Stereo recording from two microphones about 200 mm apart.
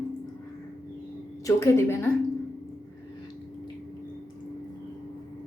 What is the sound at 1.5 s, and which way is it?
Speech, 15° left (ahead or behind).